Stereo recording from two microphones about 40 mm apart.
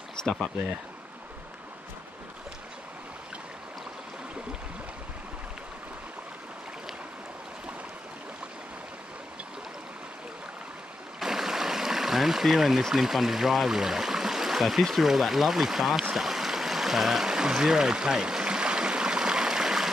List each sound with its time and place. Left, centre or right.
11.1 s stream: centre
12.9 s speech: centre
16.2 s stream: centre